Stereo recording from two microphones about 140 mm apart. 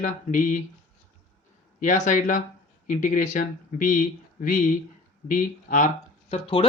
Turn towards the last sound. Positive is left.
turn(degrees=40)  # may be behind; listen again after turning